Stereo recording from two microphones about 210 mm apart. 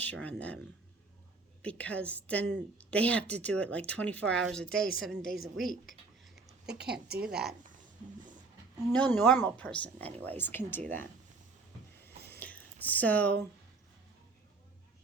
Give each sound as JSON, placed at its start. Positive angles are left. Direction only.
{"t": 0.0, "sound": "a woman's voice", "side_deg": 5}
{"t": 6.7, "sound": "a woman's voice", "side_deg": -50}
{"t": 7.3, "sound": "a woman's voice", "side_deg": -5}
{"t": 8.9, "sound": "a woman's voice", "side_deg": 5}
{"t": 12.0, "sound": "a sound", "side_deg": 10}